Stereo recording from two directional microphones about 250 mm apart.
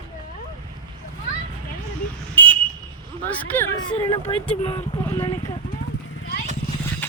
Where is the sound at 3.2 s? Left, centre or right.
Centre.